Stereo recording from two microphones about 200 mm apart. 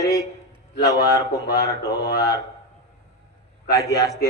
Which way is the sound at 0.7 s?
50° left (ahead or behind).